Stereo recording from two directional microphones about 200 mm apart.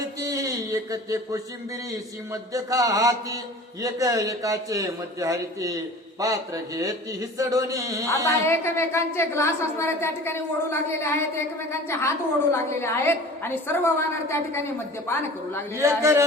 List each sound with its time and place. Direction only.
0.2 s a sound: 15° right (ahead or behind)
2.3 s mantra: 15° right (ahead or behind)
8.4 s a woman's voice: 10° left (ahead or behind)
15.7 s mantra: 15° right (ahead or behind)